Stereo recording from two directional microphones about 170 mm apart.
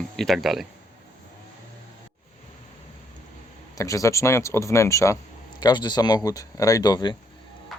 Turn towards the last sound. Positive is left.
turn(degrees=25)  # may be behind; listen again after turning